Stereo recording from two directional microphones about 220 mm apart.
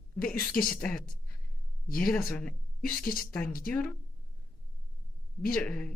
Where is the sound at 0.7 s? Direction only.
5° left (ahead or behind).